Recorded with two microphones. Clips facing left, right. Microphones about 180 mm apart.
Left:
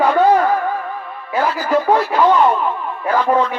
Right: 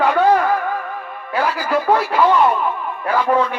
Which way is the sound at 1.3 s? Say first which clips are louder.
Left 2 dB; 10° right (ahead or behind).